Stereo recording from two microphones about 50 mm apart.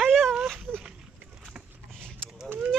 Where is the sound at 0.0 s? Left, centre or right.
Centre.